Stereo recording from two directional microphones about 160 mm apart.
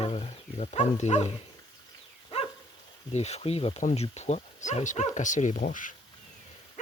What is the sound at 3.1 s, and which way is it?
Speech, 45° left (ahead or behind).